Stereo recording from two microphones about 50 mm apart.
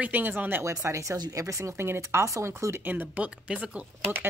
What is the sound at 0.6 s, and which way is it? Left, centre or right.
Speech, right.